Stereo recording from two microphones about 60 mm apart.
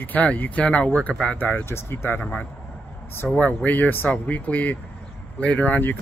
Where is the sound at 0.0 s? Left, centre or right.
Left.